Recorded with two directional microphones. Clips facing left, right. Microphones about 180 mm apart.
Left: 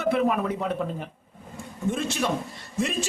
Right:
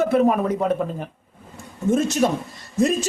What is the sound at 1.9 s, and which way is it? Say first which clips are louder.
Speech: right 8 dB; 45° right (ahead or behind).